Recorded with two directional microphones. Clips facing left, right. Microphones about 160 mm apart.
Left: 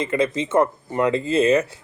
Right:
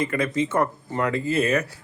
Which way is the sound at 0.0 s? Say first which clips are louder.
Left 2 dB; 20° left (ahead or behind).